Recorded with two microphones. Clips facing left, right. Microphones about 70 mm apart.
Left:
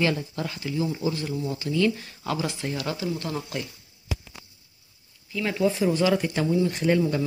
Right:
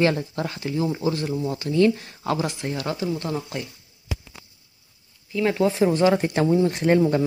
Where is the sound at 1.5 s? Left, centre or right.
Right.